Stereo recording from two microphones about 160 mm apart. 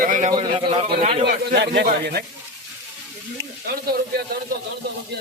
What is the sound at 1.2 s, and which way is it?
Speech, 80° right.